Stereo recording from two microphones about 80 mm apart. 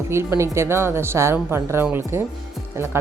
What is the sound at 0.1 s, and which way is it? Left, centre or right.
Speech, right.